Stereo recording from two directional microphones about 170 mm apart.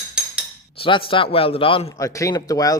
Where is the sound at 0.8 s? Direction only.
30° left (ahead or behind).